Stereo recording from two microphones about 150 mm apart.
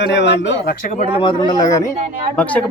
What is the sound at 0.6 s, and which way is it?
Speech, 65° left (ahead or behind).